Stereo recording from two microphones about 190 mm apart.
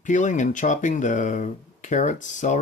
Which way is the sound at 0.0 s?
40° left (ahead or behind).